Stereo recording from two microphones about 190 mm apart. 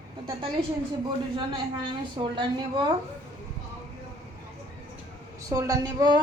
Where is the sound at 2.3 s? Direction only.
25° right (ahead or behind).